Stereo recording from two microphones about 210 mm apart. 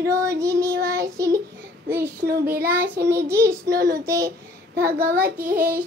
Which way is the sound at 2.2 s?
45° right (ahead or behind).